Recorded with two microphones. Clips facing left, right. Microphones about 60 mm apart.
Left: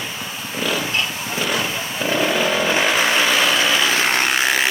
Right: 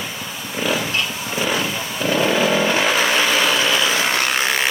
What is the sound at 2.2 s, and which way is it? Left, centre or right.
Vehicle, centre.